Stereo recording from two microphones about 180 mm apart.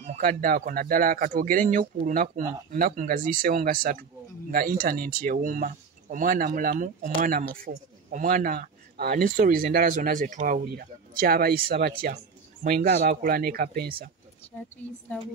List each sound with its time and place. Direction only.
0.0 s speech: 50° right (ahead or behind)
15.1 s a woman's voice: 10° left (ahead or behind)